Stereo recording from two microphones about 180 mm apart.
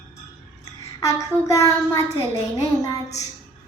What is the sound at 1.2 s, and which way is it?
Speech, 20° left (ahead or behind).